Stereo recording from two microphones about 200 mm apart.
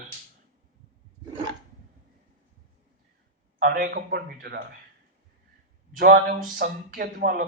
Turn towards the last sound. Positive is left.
turn(degrees=-50)  # may be behind; listen again after turning